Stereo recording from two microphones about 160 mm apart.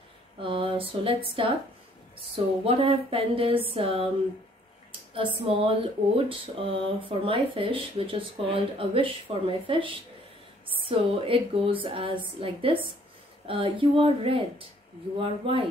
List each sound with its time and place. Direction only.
0.4 s speech: 35° right (ahead or behind)
5.1 s speech: 35° right (ahead or behind)